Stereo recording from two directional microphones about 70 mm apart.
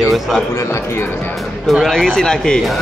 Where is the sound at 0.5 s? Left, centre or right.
Left.